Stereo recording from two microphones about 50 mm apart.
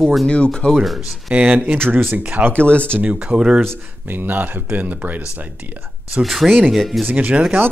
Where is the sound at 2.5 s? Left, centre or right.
Left.